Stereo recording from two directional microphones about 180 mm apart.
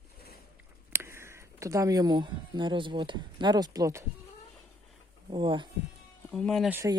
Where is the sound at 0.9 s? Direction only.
15° right (ahead or behind).